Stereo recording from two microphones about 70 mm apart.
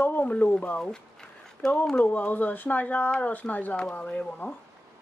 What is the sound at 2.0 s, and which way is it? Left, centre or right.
Speech, left.